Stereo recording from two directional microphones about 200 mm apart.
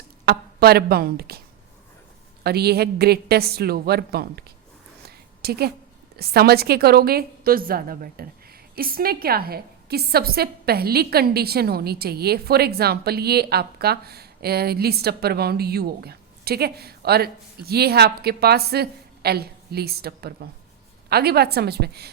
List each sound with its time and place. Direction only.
0.3 s a woman's voice: 50° right (ahead or behind)
2.4 s a woman's voice: 50° right (ahead or behind)
5.0 s a sound: 50° right (ahead or behind)
6.1 s a woman's voice: 50° right (ahead or behind)